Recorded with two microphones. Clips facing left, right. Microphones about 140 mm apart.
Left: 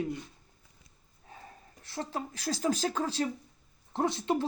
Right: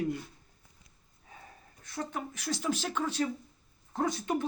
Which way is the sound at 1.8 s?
30° left (ahead or behind).